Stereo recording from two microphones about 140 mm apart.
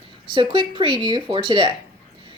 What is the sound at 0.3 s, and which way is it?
Speech, 40° right (ahead or behind).